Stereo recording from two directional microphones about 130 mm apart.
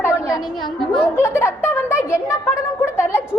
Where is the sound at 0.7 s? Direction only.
5° left (ahead or behind).